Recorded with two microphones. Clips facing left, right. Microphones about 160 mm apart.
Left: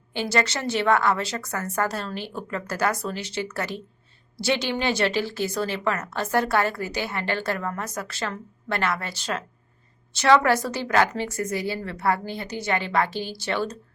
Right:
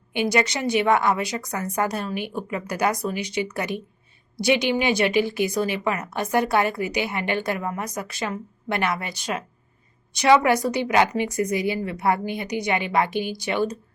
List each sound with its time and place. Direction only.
0.1 s a woman's voice: 15° right (ahead or behind)